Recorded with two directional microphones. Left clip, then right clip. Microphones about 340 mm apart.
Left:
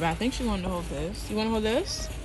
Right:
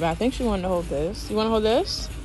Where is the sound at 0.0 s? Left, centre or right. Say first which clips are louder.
Right 4 dB; centre.